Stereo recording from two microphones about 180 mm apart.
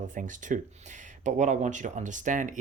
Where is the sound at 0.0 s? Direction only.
45° right (ahead or behind).